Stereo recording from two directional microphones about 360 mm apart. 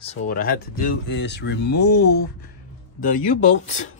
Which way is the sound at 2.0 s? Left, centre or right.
Left.